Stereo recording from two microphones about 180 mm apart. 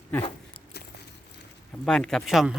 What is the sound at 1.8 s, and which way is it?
Speech, 5° left (ahead or behind).